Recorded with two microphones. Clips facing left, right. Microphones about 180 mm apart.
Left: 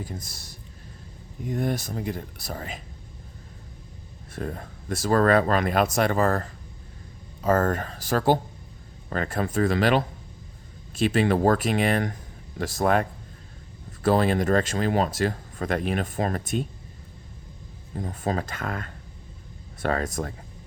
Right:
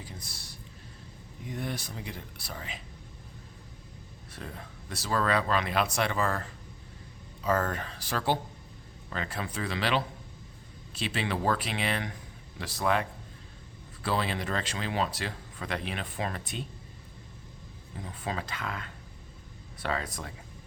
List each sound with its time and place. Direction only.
0.0 s speech: 45° left (ahead or behind)
4.4 s speech: 50° left (ahead or behind)
17.9 s speech: 45° left (ahead or behind)